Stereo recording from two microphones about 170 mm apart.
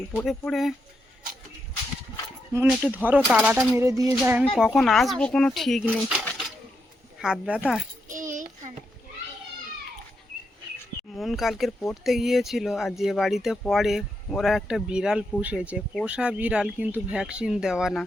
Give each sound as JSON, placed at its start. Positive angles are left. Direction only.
{"t": 0.2, "sound": "speech", "side_deg": 5}
{"t": 2.6, "sound": "speech", "side_deg": -10}
{"t": 3.2, "sound": "speech", "side_deg": 0}
{"t": 3.8, "sound": "child singing", "side_deg": -20}
{"t": 4.4, "sound": "speech", "side_deg": 0}
{"t": 8.0, "sound": "a sound", "side_deg": -50}
{"t": 11.1, "sound": "speech", "side_deg": 0}